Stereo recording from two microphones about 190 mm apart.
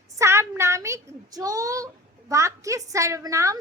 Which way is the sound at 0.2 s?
15° right (ahead or behind).